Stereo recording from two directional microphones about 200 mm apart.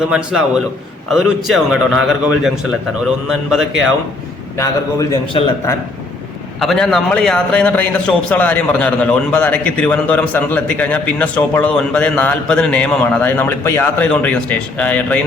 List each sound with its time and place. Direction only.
0.1 s a man's voice: 5° right (ahead or behind)
4.5 s a man's voice: 15° left (ahead or behind)
6.6 s a man's voice: centre (ahead or behind)